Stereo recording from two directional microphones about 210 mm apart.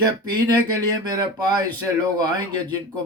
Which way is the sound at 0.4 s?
20° right (ahead or behind).